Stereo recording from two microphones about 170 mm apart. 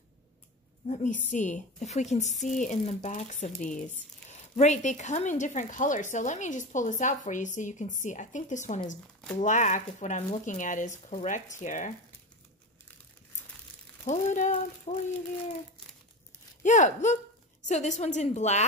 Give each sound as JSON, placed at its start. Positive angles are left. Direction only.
{"t": 0.8, "sound": "speech", "side_deg": 45}
{"t": 14.0, "sound": "speech", "side_deg": 50}
{"t": 16.6, "sound": "speech", "side_deg": 45}